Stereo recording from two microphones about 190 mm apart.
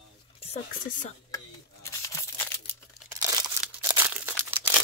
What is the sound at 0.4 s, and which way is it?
Speech, 35° left (ahead or behind).